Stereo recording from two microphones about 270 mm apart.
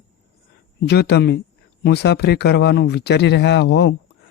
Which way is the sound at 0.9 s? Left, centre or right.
Left.